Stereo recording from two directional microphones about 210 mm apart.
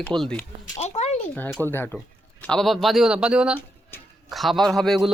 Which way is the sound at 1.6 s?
10° left (ahead or behind).